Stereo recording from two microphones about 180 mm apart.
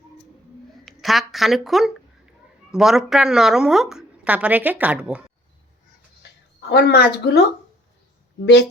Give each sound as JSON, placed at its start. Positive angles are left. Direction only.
{"t": 0.9, "sound": "a woman's voice", "side_deg": 0}
{"t": 6.7, "sound": "speech", "side_deg": 65}